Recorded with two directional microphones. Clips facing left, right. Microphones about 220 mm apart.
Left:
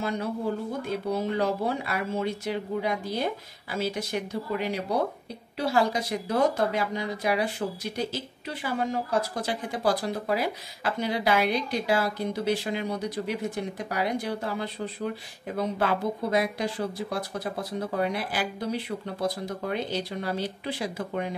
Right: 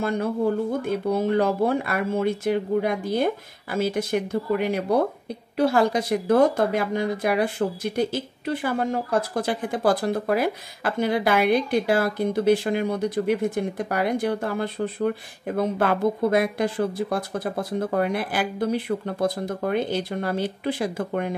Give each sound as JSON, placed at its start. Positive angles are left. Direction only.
{"t": 0.8, "sound": "speech", "side_deg": -50}